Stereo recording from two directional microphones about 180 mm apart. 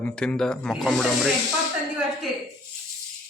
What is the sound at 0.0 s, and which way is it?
Speech, 5° left (ahead or behind).